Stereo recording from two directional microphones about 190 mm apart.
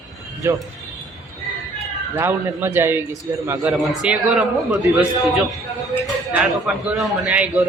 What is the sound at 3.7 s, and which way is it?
A man's voice, 5° right (ahead or behind).